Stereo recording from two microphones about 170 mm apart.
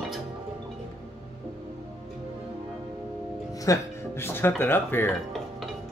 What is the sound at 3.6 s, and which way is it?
Music, 15° left (ahead or behind).